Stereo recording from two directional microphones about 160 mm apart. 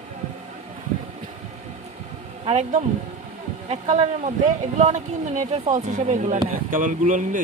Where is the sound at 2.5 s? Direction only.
45° right (ahead or behind).